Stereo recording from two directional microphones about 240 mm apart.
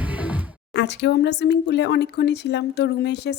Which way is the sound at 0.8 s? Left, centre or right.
Left.